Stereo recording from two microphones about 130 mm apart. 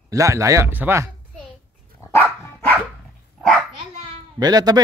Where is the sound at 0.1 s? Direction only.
25° right (ahead or behind).